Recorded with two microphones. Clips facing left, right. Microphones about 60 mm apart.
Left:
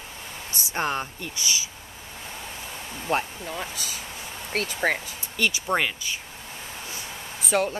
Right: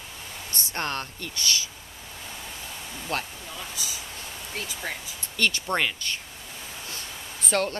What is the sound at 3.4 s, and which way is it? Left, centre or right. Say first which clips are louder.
Speech: left 4 dB; left.